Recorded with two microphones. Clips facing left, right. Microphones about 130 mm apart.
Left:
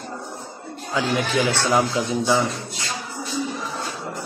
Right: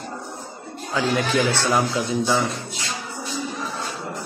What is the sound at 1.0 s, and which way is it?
A man's voice, 15° left (ahead or behind).